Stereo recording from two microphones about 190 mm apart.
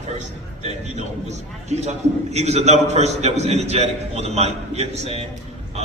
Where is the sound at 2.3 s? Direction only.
35° right (ahead or behind).